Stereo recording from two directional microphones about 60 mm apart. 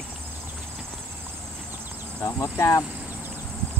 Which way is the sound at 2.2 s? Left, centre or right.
Left.